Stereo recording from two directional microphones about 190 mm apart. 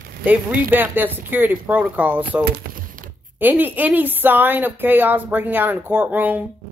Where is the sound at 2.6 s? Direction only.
45° right (ahead or behind).